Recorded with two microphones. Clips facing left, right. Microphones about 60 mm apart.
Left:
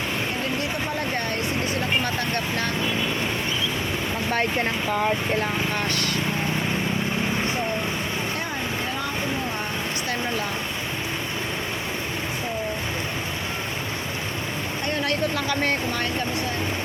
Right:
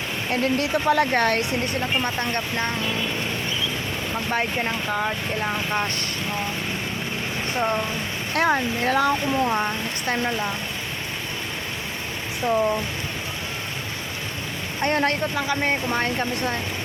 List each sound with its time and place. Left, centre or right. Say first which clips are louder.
0.6 s speech: right 7 dB; right
2.3 s speech: even; right
8.4 s speech: right 7 dB; right
14.8 s speech: right 5 dB; right
15.4 s speech: right 1 dB; centre
15.9 s speech: right 2 dB; right